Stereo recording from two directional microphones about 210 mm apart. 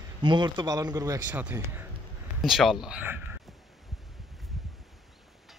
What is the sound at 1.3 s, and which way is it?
A man's voice, 5° right (ahead or behind).